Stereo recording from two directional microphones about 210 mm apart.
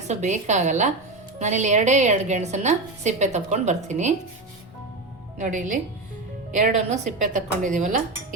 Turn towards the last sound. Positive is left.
turn(degrees=-40)  # may be behind; listen again after turning